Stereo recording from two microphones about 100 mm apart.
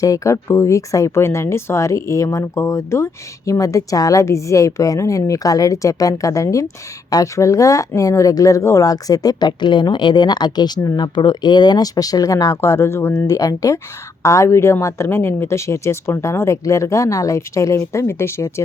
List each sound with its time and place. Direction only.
0.0 s speech: 30° left (ahead or behind)
13.2 s speech: 35° left (ahead or behind)